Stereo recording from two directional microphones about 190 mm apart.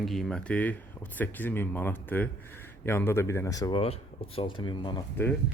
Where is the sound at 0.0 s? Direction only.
Centre (ahead or behind); by 5.0 s 25° left (ahead or behind).